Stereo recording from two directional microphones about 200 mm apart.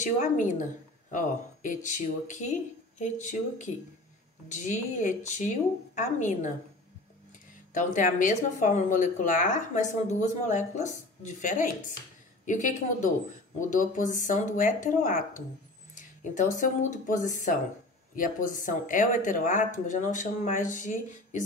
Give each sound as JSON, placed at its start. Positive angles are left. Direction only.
{"t": 0.0, "sound": "speech", "side_deg": 40}
{"t": 7.7, "sound": "a woman's voice", "side_deg": 40}